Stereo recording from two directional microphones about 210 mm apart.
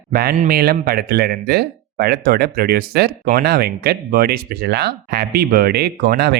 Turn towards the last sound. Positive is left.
turn(degrees=-45)  # may be behind; listen again after turning